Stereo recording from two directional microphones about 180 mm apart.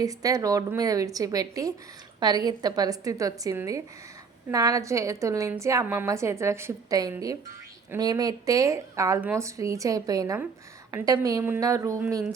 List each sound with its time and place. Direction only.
0.0 s a woman's voice: 20° right (ahead or behind)